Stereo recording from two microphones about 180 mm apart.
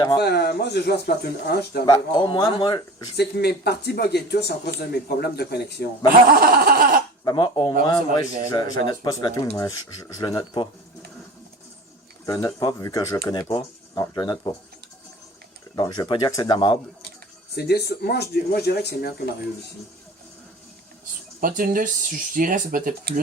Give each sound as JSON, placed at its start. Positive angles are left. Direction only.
{"t": 0.2, "sound": "speech", "side_deg": 65}
{"t": 1.9, "sound": "speech", "side_deg": 25}
{"t": 3.2, "sound": "speech", "side_deg": 65}
{"t": 6.2, "sound": "speech", "side_deg": -55}
{"t": 7.3, "sound": "speech", "side_deg": 25}
{"t": 12.2, "sound": "speech", "side_deg": 15}
{"t": 15.7, "sound": "speech", "side_deg": 25}
{"t": 17.5, "sound": "speech", "side_deg": 65}
{"t": 21.4, "sound": "speech", "side_deg": -50}